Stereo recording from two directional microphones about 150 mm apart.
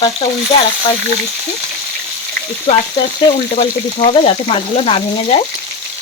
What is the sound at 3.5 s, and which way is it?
A woman's voice, 40° left (ahead or behind).